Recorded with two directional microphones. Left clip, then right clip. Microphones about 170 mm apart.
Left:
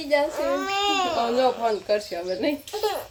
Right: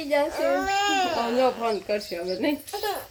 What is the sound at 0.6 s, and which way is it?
Speech, 20° left (ahead or behind).